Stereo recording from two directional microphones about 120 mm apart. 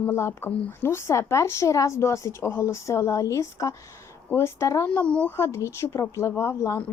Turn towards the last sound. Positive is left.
turn(degrees=25)  # may be behind; listen again after turning